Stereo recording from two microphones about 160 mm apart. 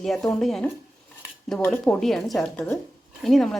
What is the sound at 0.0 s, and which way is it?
A woman's voice, 5° left (ahead or behind).